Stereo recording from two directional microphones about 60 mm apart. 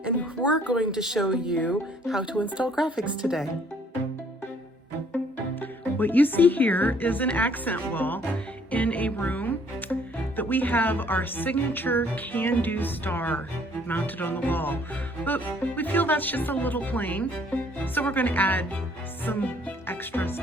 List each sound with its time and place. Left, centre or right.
0.7 s speech: centre
0.9 s speech: centre
2.2 s speech: centre
5.5 s speech: left
19.2 s music: left